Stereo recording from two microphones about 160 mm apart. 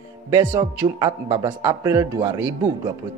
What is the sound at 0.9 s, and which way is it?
Speech, 25° right (ahead or behind).